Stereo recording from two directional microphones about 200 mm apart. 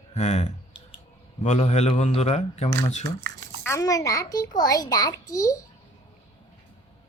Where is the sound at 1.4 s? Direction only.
35° left (ahead or behind).